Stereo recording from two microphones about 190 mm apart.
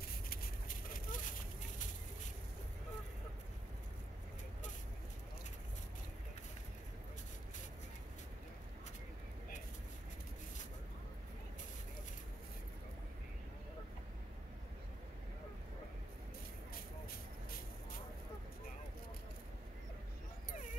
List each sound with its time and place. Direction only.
0.3 s vehicle: 50° left (ahead or behind)